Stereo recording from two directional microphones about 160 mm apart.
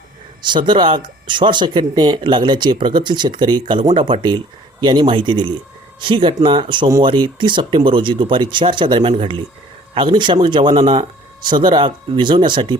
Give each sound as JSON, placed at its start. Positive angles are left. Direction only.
{"t": 0.4, "sound": "speech", "side_deg": -30}